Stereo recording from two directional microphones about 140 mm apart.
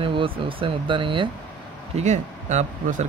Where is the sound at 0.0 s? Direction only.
40° right (ahead or behind).